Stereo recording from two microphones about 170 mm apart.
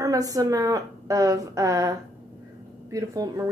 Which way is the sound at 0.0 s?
20° right (ahead or behind).